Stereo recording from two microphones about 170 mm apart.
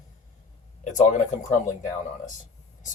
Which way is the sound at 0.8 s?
45° left (ahead or behind).